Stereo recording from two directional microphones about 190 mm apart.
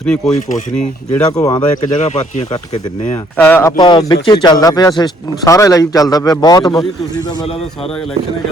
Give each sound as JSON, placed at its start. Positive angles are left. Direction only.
{"t": 0.0, "sound": "speech", "side_deg": 5}
{"t": 1.4, "sound": "a man's voice", "side_deg": 20}
{"t": 2.0, "sound": "speech", "side_deg": 35}
{"t": 3.3, "sound": "a man's voice", "side_deg": 10}